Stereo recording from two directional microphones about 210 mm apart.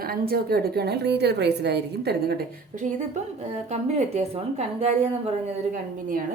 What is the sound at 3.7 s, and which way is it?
A woman's voice, 30° right (ahead or behind).